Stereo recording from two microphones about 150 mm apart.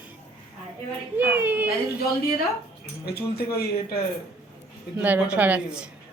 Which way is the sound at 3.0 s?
90° left.